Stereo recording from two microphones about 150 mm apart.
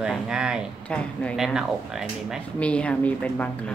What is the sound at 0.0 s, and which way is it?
Speech, 5° right (ahead or behind).